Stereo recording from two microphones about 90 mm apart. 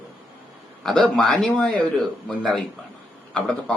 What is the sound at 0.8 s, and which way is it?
Speech, 5° left (ahead or behind).